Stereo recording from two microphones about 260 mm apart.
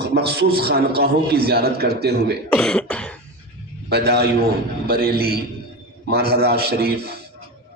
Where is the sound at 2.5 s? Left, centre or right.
Centre.